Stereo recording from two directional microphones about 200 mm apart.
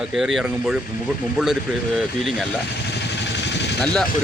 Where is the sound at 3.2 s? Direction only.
60° left (ahead or behind).